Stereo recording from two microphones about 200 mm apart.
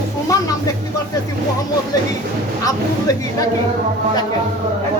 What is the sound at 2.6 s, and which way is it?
Speech, 15° left (ahead or behind).